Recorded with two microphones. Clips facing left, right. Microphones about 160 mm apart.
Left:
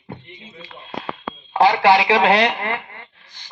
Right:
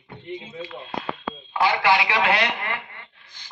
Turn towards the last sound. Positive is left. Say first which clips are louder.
# left 5 dB
turn(degrees=35)  # may be behind; listen again after turning